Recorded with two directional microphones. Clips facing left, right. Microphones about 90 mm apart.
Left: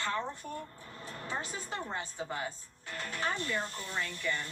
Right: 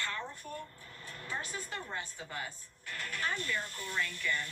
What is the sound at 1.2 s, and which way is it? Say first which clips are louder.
Speech: left 1 dB; 25° left (ahead or behind).